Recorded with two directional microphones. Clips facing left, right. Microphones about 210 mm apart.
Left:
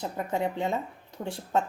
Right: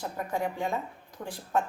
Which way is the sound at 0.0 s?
20° left (ahead or behind).